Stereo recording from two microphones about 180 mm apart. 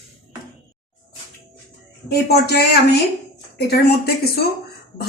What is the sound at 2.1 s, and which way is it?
Speech, 65° left (ahead or behind).